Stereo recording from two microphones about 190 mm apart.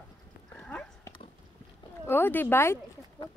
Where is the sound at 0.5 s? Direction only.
10° left (ahead or behind).